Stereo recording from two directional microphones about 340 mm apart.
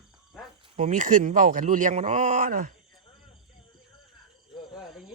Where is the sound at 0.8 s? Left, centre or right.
Right.